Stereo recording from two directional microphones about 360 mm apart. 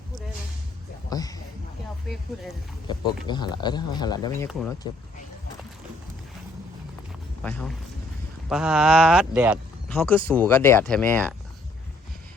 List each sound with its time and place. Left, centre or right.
1.1 s a sound: centre
2.8 s speech: centre
7.4 s speech: centre